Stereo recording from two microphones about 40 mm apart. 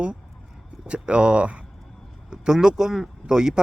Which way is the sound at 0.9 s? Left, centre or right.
Right.